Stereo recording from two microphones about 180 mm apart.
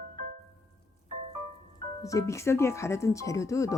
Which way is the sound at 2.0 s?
15° left (ahead or behind).